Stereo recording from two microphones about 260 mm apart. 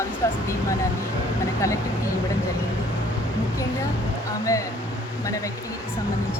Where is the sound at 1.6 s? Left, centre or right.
Centre.